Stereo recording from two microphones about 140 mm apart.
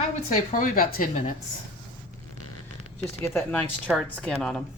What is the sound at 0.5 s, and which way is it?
Speech, 75° left (ahead or behind).